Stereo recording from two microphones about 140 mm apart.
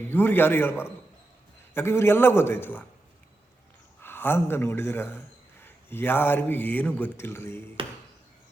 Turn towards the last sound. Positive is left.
turn(degrees=15)  # may be behind; listen again after turning